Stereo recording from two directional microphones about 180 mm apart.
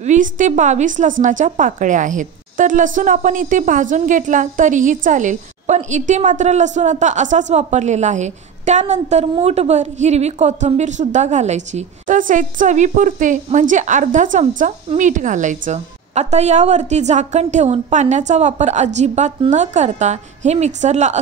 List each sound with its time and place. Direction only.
0.0 s a woman's voice: 45° right (ahead or behind)